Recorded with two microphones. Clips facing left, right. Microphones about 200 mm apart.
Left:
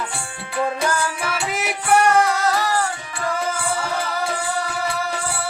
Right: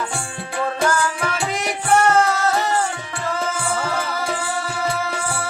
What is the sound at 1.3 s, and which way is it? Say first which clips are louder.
Music: right 1 dB; 5° left (ahead or behind).